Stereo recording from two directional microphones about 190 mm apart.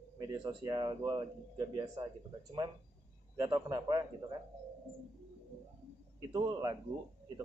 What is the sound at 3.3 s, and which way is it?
A man's voice, 20° right (ahead or behind).